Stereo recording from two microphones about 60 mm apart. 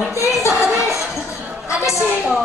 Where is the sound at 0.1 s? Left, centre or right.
Left.